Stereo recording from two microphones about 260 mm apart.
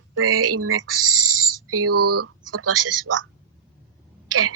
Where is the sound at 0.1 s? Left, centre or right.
Right.